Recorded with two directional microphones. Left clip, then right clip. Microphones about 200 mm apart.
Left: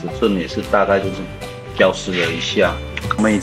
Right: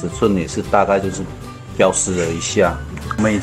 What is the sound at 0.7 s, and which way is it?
Speech, 5° right (ahead or behind).